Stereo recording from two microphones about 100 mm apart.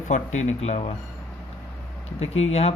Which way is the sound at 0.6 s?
75° left (ahead or behind).